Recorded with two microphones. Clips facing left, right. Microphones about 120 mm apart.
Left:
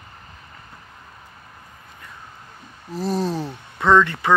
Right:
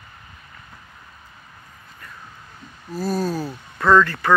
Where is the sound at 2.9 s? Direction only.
20° left (ahead or behind).